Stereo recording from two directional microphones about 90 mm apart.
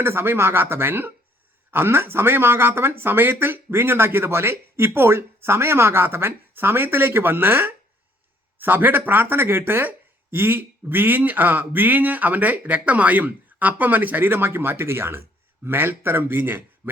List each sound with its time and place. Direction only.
0.0 s speech: 25° right (ahead or behind)